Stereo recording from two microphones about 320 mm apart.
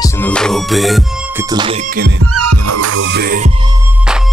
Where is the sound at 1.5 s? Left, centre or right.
Centre.